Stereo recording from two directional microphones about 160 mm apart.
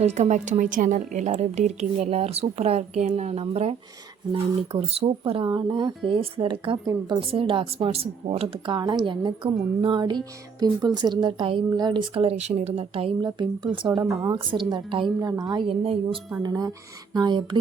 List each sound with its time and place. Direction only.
0.0 s a woman's voice: 45° right (ahead or behind); by 14.0 s 30° right (ahead or behind)
14.0 s a woman's voice: centre (ahead or behind)
14.3 s a woman's voice: 30° right (ahead or behind)
16.4 s a woman's voice: 25° right (ahead or behind)